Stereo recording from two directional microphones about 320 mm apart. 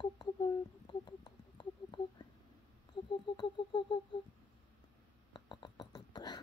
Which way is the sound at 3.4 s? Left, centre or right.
Centre.